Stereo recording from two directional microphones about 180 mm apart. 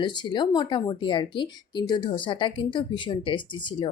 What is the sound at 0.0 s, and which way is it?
Speech, 25° left (ahead or behind).